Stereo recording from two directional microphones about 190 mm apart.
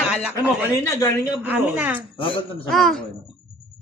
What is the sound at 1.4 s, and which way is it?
A woman's voice, 10° right (ahead or behind).